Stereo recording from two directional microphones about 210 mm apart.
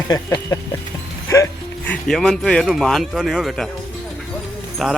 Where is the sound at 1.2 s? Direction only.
15° left (ahead or behind).